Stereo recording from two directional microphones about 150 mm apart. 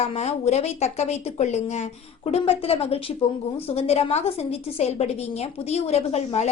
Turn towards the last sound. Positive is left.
turn(degrees=45)  # may be behind; listen again after turning